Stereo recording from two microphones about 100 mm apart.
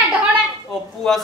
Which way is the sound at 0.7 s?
Centre (ahead or behind).